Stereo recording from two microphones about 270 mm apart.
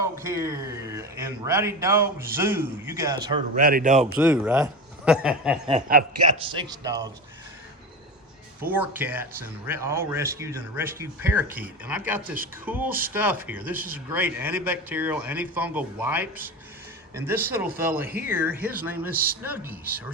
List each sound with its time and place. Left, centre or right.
0.0 s a man's voice: centre
3.6 s a man's voice: right
4.2 s a man's voice: centre
6.4 s speech: centre
8.7 s speech: centre